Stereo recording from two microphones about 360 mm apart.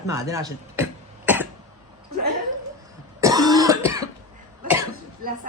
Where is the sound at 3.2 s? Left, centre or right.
Centre.